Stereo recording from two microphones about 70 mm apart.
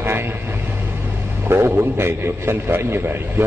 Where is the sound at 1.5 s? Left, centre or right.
Right.